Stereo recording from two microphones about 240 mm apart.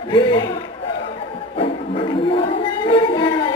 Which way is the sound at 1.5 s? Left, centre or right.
Left.